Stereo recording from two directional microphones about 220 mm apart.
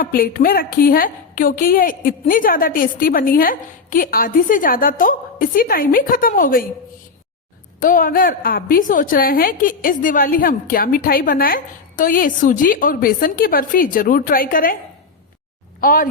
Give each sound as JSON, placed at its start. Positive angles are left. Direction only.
{"t": 0.0, "sound": "a woman's voice", "side_deg": 40}
{"t": 7.8, "sound": "a woman's voice", "side_deg": 40}
{"t": 15.8, "sound": "speech", "side_deg": 40}